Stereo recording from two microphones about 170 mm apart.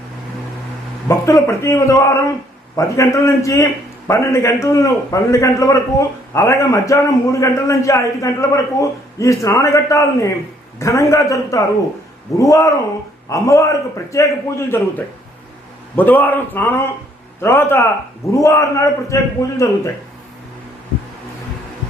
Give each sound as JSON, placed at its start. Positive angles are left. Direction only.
{"t": 1.0, "sound": "a man's voice", "side_deg": 15}